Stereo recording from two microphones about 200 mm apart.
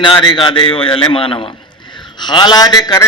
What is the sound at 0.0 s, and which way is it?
A man's voice, 25° left (ahead or behind).